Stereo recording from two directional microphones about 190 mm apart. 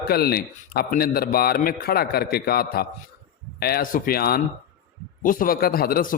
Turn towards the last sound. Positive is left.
turn(degrees=50)  # may be behind; listen again after turning